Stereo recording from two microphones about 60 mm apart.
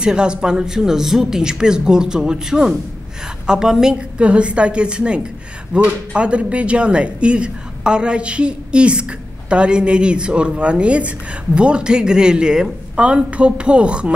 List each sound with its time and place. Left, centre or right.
0.0 s speech: centre
4.2 s a woman's voice: centre